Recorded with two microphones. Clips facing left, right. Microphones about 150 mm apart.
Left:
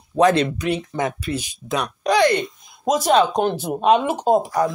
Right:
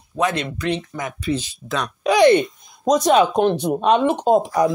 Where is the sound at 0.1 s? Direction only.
35° left (ahead or behind).